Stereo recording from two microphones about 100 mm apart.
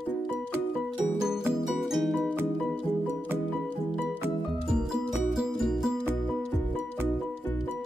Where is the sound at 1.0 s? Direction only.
5° right (ahead or behind).